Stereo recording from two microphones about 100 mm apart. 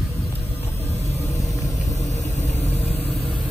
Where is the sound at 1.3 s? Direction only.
35° left (ahead or behind).